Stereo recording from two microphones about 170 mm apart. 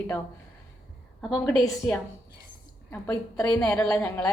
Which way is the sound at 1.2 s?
Centre (ahead or behind).